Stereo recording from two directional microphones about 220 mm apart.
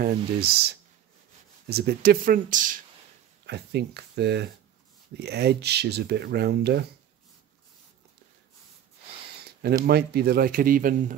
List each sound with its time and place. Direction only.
0.0 s speech: 45° right (ahead or behind)
3.4 s speech: 50° right (ahead or behind)
9.4 s a sound: 45° right (ahead or behind)
9.8 s speech: 45° right (ahead or behind)